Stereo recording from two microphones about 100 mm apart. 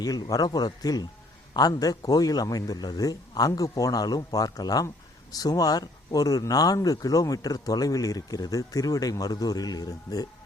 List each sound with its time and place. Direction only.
0.0 s speech: 40° left (ahead or behind)